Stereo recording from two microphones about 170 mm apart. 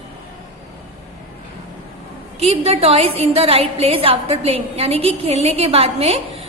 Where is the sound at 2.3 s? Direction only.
35° right (ahead or behind).